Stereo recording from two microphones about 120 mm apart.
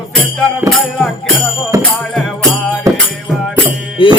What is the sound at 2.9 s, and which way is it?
Music, 30° right (ahead or behind).